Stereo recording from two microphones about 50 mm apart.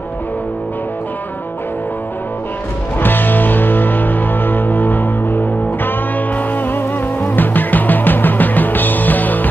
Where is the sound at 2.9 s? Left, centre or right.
Left.